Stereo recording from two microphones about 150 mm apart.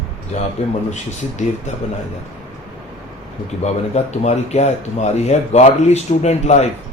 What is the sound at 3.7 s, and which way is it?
Speech, 45° left (ahead or behind).